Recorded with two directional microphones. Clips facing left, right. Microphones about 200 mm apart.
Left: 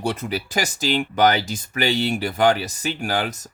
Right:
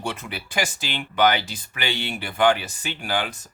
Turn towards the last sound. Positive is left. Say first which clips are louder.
# left 3 dB
turn(degrees=40)  # may be behind; listen again after turning